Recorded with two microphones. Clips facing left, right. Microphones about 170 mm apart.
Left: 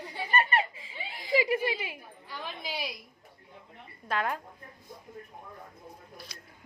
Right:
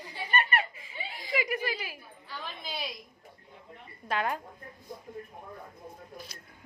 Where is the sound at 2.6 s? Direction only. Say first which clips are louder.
Left 2 dB; 15° left (ahead or behind).